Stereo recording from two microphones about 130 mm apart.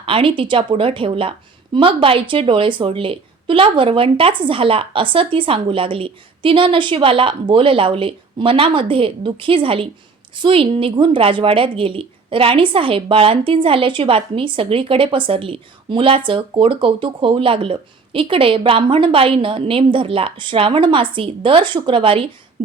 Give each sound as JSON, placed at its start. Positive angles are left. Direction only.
{"t": 0.0, "sound": "a woman's voice", "side_deg": -45}